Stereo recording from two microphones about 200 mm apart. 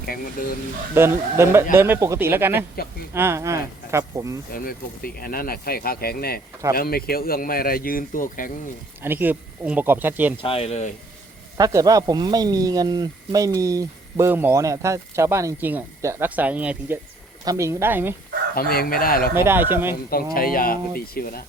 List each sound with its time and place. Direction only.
0.0 s speech: 45° left (ahead or behind)
0.9 s speech: 10° right (ahead or behind)
4.5 s speech: 45° left (ahead or behind)
9.0 s speech: 10° right (ahead or behind)
10.4 s speech: 30° left (ahead or behind)
11.5 s speech: 15° right (ahead or behind)
18.5 s speech: 50° left (ahead or behind)
19.3 s speech: 10° right (ahead or behind)
20.3 s speech: 45° left (ahead or behind)